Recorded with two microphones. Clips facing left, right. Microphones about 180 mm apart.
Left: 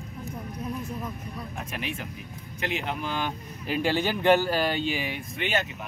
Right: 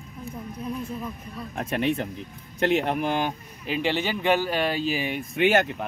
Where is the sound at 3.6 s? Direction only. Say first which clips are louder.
Even; 15° right (ahead or behind).